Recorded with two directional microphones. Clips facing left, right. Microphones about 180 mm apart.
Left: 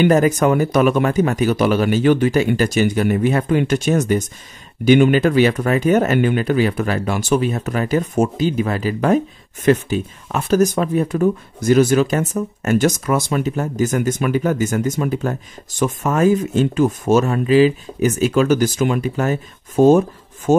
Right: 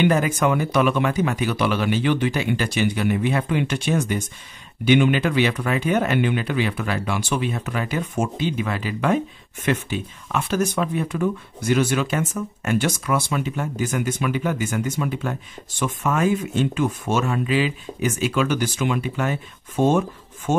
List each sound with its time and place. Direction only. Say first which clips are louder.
0.0 s speech: left 5 dB; 40° left (ahead or behind)